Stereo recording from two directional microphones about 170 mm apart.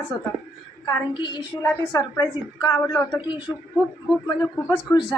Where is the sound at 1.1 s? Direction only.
25° left (ahead or behind).